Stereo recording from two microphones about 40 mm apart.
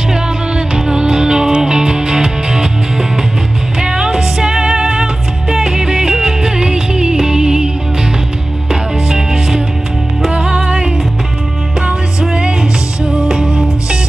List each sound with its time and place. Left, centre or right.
0.7 s music: right
9.1 s music: centre
10.3 s music: right